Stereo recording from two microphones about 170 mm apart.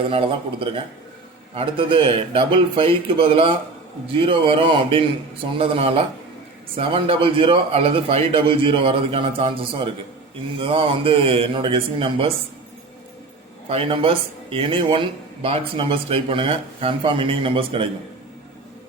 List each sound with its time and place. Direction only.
0.1 s speech: 30° right (ahead or behind)
13.7 s speech: 35° right (ahead or behind)